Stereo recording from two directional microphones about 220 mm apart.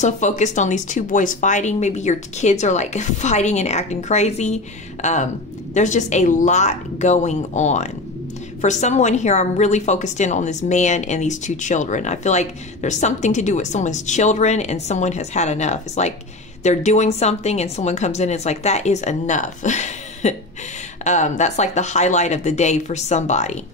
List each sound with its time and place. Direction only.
0.0 s a woman's voice: 35° left (ahead or behind)